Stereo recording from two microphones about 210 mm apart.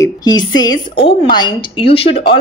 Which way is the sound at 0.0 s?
20° left (ahead or behind).